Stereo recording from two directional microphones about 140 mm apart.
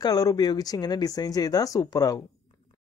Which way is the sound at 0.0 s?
25° left (ahead or behind).